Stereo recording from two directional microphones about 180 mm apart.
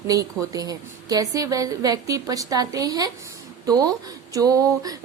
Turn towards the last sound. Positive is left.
turn(degrees=-20)  # may be behind; listen again after turning